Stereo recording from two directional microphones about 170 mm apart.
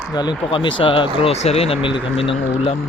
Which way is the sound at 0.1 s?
25° left (ahead or behind).